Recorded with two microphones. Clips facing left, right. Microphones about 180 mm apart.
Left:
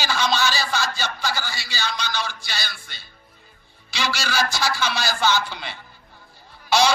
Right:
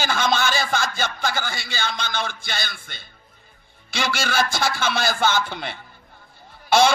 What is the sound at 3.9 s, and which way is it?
A man's voice, 50° right (ahead or behind).